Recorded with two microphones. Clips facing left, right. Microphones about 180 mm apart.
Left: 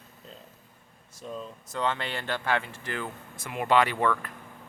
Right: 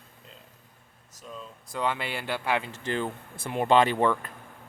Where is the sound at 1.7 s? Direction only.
10° right (ahead or behind); by 4.3 s 25° right (ahead or behind).